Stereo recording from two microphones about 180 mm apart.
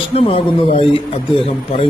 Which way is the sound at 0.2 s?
30° left (ahead or behind).